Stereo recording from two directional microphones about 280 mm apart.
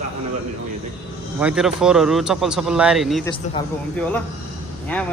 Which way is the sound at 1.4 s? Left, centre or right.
Centre.